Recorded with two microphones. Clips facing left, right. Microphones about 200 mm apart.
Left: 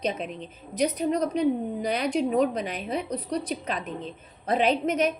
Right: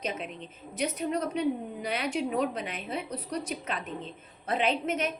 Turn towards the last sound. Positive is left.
turn(degrees=40)  # may be behind; listen again after turning